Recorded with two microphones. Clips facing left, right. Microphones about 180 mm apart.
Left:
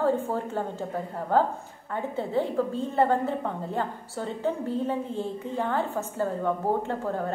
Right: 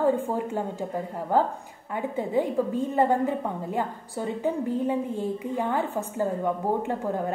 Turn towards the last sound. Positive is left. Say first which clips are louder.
# right 1 dB
turn(degrees=-15)  # may be behind; listen again after turning